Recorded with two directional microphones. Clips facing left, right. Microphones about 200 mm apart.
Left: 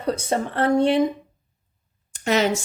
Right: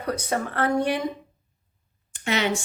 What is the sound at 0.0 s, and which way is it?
Speech, 25° left (ahead or behind).